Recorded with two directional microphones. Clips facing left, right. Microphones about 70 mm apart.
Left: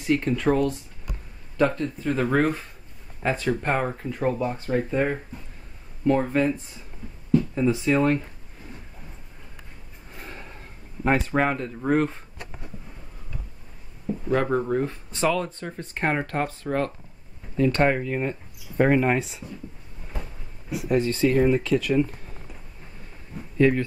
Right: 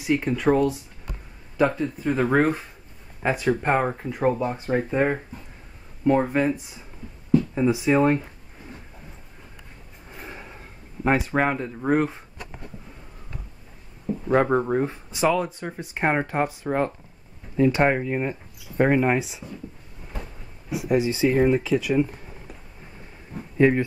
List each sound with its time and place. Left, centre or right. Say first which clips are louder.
0.0 s speech: right 1 dB; centre
6.0 s speech: right 1 dB; centre
10.1 s a sound: right 1 dB; centre
11.1 s speech: right 1 dB; centre
14.3 s speech: right 3 dB; right; by 19.4 s centre
20.7 s speech: right 1 dB; centre
23.6 s speech: right 2 dB; centre